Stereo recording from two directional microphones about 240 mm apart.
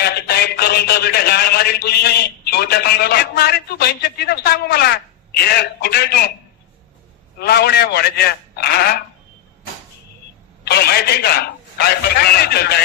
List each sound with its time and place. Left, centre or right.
0.0 s a sound: left
7.3 s a man's voice: left
10.6 s a man's voice: left